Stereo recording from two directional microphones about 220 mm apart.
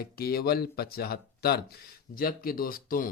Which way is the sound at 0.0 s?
45° left (ahead or behind).